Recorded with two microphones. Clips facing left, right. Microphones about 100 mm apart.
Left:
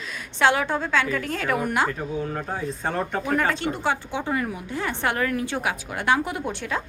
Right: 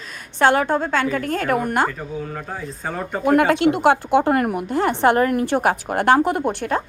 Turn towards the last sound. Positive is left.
turn(degrees=-55)  # may be behind; listen again after turning